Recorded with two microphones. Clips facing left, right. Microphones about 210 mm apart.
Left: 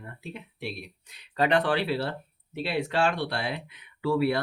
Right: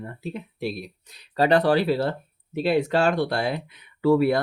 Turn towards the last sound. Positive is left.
turn(degrees=-45)  # may be behind; listen again after turning